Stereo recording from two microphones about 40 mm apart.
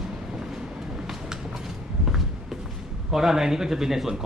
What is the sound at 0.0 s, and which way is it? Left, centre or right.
Train, centre.